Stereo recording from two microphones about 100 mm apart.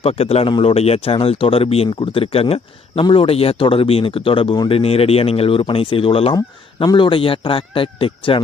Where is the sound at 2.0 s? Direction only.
65° left (ahead or behind).